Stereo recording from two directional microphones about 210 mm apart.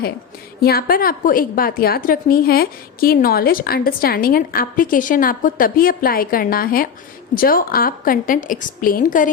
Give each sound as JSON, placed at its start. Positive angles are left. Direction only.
{"t": 0.6, "sound": "a woman's voice", "side_deg": 45}